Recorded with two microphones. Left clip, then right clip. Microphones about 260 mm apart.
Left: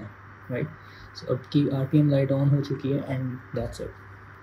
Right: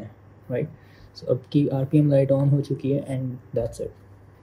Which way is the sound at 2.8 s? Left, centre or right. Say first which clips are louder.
Right 3 dB; right.